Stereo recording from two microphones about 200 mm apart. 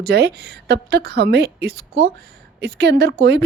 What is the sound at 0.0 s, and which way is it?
A woman's voice, 55° right (ahead or behind).